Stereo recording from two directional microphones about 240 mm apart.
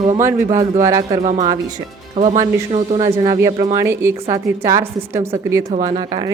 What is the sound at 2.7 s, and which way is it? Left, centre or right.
Speech, right.